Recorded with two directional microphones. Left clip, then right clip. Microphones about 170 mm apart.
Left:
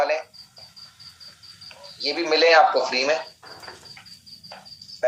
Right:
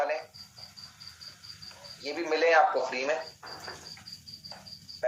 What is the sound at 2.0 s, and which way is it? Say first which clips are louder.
A man's voice: left 8 dB; 30° left (ahead or behind).